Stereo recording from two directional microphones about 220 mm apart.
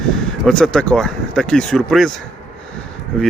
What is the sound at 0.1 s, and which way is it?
Speech, centre (ahead or behind).